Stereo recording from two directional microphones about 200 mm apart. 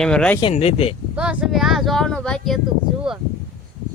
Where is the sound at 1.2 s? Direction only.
5° right (ahead or behind).